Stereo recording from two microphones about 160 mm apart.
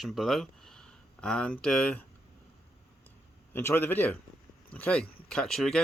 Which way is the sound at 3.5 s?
15° left (ahead or behind).